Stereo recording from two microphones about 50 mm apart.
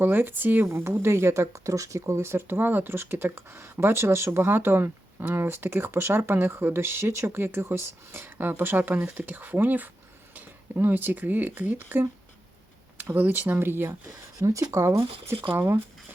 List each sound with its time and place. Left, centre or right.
0.0 s speech: right
0.7 s speech: right
13.6 s speech: right
14.4 s speech: right